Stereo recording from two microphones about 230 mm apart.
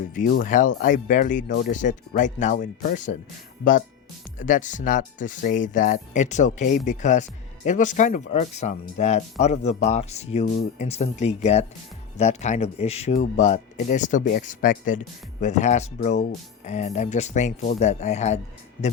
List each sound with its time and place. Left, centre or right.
0.1 s speech: left